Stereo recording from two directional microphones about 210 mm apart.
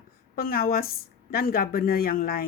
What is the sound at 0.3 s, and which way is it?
A woman's voice, 45° left (ahead or behind).